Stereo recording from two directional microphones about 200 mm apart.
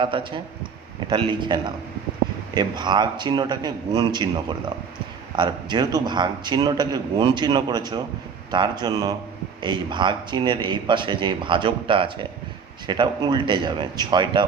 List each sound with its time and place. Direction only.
0.0 s a man's voice: 25° right (ahead or behind)